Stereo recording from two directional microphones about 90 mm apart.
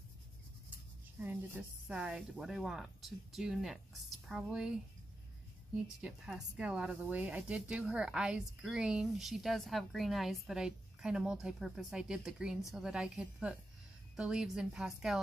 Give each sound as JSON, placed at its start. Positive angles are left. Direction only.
{"t": 1.2, "sound": "a woman's voice", "side_deg": -20}
{"t": 5.9, "sound": "a woman's voice", "side_deg": -5}